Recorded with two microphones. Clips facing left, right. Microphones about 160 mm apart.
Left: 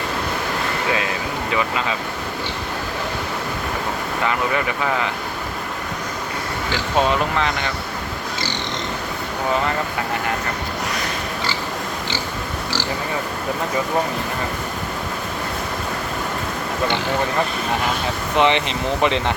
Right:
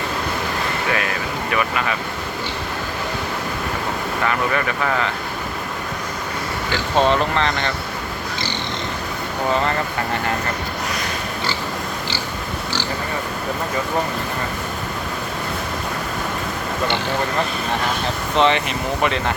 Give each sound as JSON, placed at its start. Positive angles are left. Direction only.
{"t": 1.5, "sound": "speech", "side_deg": 20}
{"t": 4.3, "sound": "speech", "side_deg": 15}
{"t": 7.1, "sound": "speech", "side_deg": 5}
{"t": 18.3, "sound": "speech", "side_deg": 15}